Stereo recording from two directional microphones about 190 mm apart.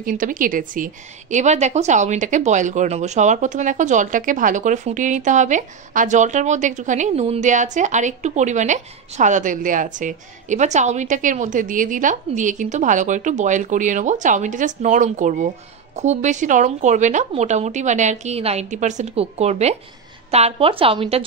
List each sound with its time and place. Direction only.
0.0 s a woman's voice: 45° right (ahead or behind); by 21.2 s 30° right (ahead or behind)